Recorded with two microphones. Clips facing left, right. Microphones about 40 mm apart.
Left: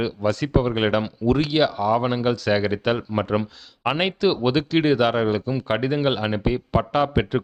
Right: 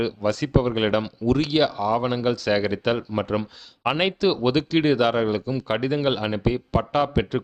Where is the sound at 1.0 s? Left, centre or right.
Centre.